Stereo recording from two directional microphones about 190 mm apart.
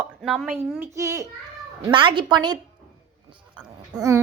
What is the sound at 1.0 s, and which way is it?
A woman's voice, 15° right (ahead or behind).